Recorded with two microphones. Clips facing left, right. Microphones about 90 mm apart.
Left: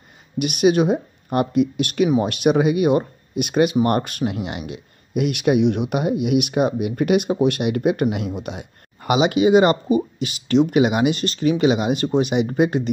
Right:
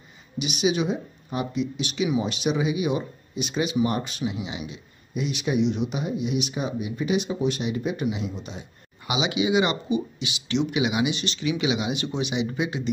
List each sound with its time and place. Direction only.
0.4 s speech: 55° left (ahead or behind)